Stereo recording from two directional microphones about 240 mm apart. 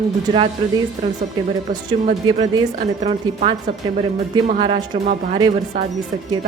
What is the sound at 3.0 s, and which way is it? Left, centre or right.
A woman's voice, right.